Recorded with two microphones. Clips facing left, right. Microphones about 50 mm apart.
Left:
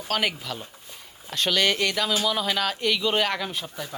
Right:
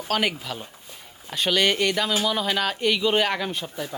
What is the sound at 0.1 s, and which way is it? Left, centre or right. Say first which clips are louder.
Speech: right 2 dB; centre.